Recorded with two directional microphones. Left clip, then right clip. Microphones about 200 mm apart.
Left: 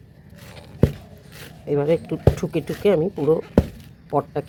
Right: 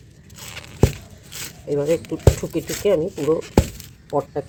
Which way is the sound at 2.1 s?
35° left (ahead or behind).